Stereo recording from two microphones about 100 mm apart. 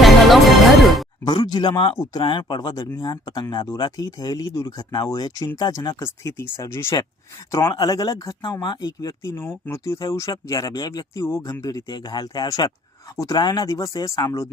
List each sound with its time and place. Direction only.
0.0 s music: centre (ahead or behind)
1.2 s a man's voice: 45° left (ahead or behind)
6.3 s speech: 25° left (ahead or behind)
7.5 s speech: 35° left (ahead or behind)
9.4 s speech: 25° left (ahead or behind); by 11.2 s 40° left (ahead or behind)
11.2 s speech: 30° left (ahead or behind)
11.6 s a man's voice: 40° left (ahead or behind)